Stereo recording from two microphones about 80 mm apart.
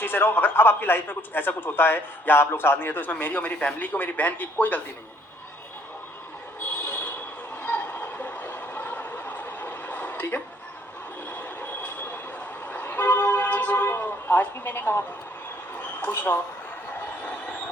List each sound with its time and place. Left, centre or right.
0.0 s a man's voice: left
6.8 s a sound: left
7.5 s train: centre
12.6 s vehicle: left
15.7 s a sound: left
17.2 s train: centre